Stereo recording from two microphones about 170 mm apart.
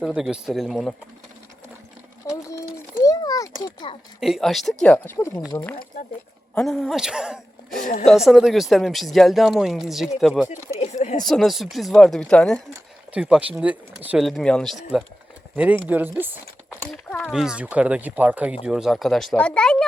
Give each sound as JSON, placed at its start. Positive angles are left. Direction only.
{"t": 0.0, "sound": "speech", "side_deg": -5}
{"t": 2.2, "sound": "a sound", "side_deg": 20}
{"t": 3.6, "sound": "a child's voice", "side_deg": 25}
{"t": 4.2, "sound": "a woman's voice", "side_deg": 0}
{"t": 10.5, "sound": "a sound", "side_deg": 45}
{"t": 11.3, "sound": "speech", "side_deg": 0}
{"t": 13.1, "sound": "speech", "side_deg": -5}
{"t": 15.9, "sound": "speech", "side_deg": -10}
{"t": 16.6, "sound": "speech", "side_deg": 5}